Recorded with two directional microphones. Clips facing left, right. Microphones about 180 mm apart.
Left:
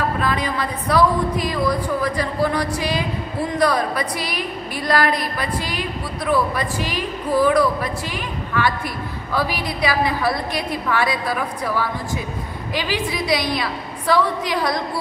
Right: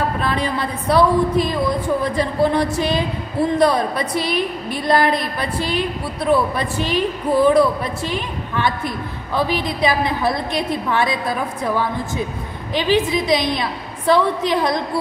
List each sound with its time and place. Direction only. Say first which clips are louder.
0.2 s a woman's voice: right 1 dB; 30° right (ahead or behind)